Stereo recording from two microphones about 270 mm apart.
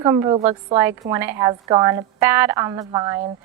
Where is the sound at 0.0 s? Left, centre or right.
Centre.